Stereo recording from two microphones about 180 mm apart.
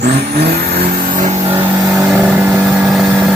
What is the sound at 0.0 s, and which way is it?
Vehicle, 60° right (ahead or behind).